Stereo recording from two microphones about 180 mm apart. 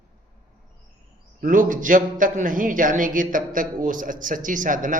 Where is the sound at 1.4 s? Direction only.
50° right (ahead or behind).